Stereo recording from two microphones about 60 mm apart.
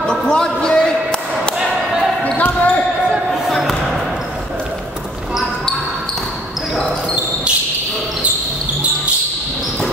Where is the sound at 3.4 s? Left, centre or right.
Centre.